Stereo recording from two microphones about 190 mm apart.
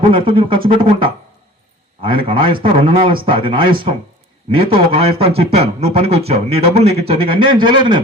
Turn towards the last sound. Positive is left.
turn(degrees=-25)  # may be behind; listen again after turning